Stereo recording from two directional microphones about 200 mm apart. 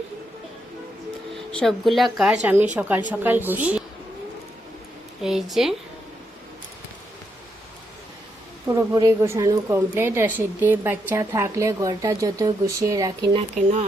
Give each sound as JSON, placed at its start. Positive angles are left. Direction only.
{"t": 1.5, "sound": "speech", "side_deg": 0}
{"t": 5.2, "sound": "speech", "side_deg": 0}
{"t": 8.6, "sound": "speech", "side_deg": -15}